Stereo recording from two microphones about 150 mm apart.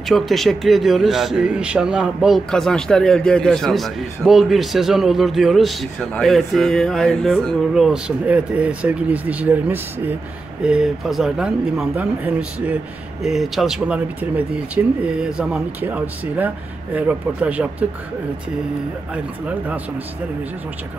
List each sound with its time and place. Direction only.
0.1 s a man's voice: centre (ahead or behind)